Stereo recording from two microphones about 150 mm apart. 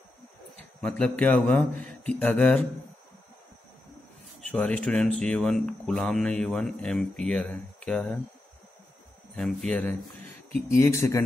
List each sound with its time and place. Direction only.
0.7 s speech: 5° left (ahead or behind)
4.4 s speech: 5° left (ahead or behind)
9.3 s speech: 5° left (ahead or behind); by 11.2 s 20° left (ahead or behind)